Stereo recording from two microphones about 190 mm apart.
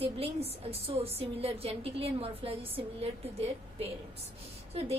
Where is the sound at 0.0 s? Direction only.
30° right (ahead or behind).